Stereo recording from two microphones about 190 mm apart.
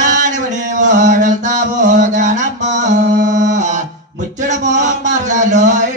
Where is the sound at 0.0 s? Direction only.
40° right (ahead or behind).